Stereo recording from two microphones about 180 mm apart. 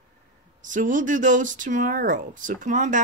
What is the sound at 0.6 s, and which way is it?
Speech, 45° right (ahead or behind).